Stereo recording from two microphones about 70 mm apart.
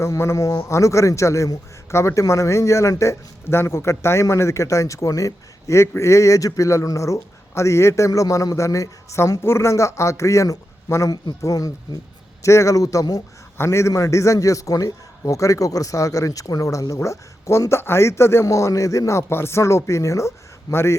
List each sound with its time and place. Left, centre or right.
0.0 s a man's voice: left
11.4 s a man's voice: left
13.6 s a man's voice: left
19.3 s speech: left